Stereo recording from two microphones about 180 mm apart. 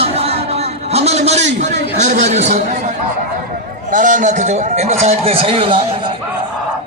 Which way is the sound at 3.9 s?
45° right (ahead or behind).